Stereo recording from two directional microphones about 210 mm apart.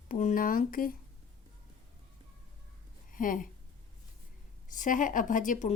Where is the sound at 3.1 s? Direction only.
40° left (ahead or behind).